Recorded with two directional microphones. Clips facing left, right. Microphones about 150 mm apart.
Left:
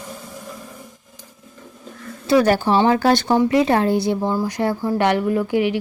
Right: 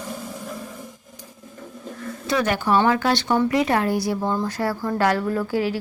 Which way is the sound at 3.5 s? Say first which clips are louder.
Left 4 dB; 30° left (ahead or behind).